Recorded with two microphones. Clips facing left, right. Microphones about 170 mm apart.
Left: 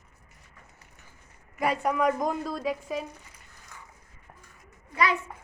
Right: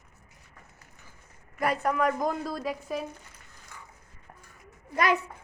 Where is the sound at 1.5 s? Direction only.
10° left (ahead or behind).